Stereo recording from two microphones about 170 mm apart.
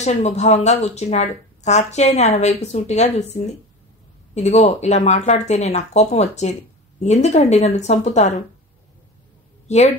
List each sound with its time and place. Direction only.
0.0 s speech: 40° left (ahead or behind)
9.7 s a woman's voice: 40° left (ahead or behind)